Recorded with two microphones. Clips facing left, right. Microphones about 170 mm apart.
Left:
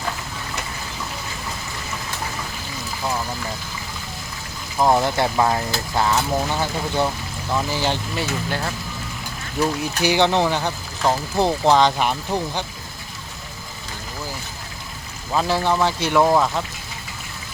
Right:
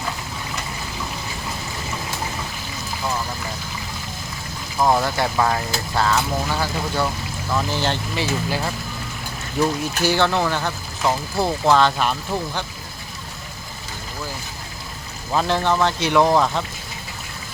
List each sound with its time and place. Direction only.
4.9 s speech: 20° left (ahead or behind)
8.1 s speech: centre (ahead or behind)
10.0 s speech: 15° left (ahead or behind)
15.3 s speech: 5° left (ahead or behind)